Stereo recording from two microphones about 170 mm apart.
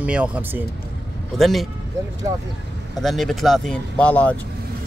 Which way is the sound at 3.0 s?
Centre (ahead or behind).